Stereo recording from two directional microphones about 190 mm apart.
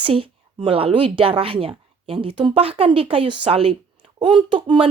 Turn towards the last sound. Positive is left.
turn(degrees=-25)  # may be behind; listen again after turning